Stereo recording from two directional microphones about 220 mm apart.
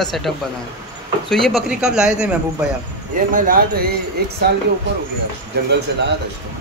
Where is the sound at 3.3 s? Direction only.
35° right (ahead or behind).